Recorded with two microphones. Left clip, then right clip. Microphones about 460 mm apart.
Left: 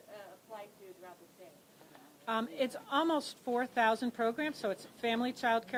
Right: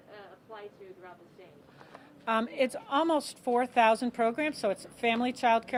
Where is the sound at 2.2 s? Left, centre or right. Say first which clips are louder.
Right 6 dB; right.